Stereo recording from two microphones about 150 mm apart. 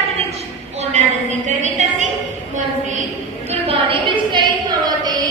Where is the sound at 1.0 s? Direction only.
50° right (ahead or behind).